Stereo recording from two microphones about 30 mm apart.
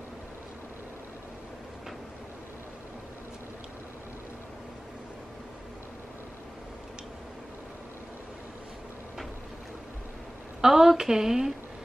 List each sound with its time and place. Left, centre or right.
10.6 s speech: centre